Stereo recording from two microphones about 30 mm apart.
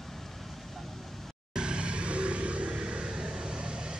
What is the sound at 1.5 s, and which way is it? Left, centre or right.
Vehicle, right.